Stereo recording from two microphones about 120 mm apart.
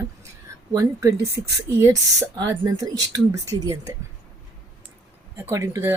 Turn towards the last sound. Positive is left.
turn(degrees=-20)  # may be behind; listen again after turning